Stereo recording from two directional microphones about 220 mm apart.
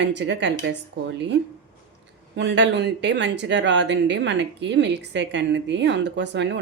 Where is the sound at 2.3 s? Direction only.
55° right (ahead or behind).